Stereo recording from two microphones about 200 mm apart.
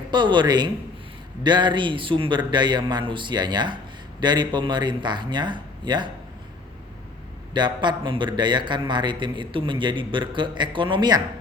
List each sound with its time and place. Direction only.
0.1 s a man's voice: 25° right (ahead or behind)
7.5 s a man's voice: 20° right (ahead or behind)